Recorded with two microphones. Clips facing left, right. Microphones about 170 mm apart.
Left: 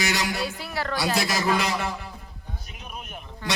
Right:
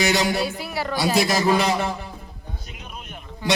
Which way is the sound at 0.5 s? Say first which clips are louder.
Right 3 dB; 10° right (ahead or behind).